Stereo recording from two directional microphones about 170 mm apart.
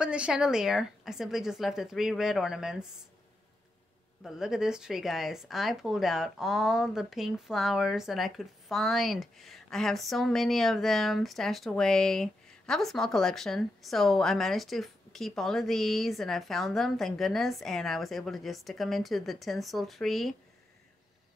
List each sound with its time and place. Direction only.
0.0 s speech: 5° right (ahead or behind)
4.2 s speech: centre (ahead or behind)